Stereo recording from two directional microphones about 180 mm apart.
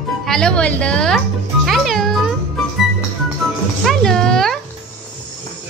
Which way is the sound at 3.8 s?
5° left (ahead or behind).